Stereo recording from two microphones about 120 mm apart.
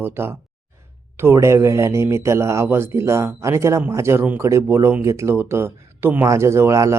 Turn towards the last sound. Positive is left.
turn(degrees=-25)  # may be behind; listen again after turning